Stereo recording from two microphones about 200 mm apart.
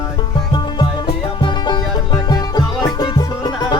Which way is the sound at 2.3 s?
20° left (ahead or behind).